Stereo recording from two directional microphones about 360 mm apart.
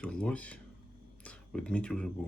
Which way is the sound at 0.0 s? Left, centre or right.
Centre.